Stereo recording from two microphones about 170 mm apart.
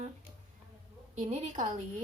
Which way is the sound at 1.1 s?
40° right (ahead or behind).